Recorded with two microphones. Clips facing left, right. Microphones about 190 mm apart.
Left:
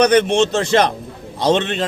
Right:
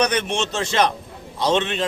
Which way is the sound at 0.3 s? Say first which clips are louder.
Left 9 dB; 35° left (ahead or behind).